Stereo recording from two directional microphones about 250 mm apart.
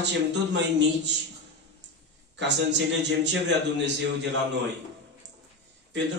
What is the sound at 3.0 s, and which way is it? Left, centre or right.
Speech, right.